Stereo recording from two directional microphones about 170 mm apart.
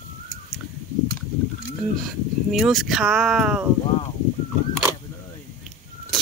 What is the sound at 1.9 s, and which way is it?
Speech, centre (ahead or behind).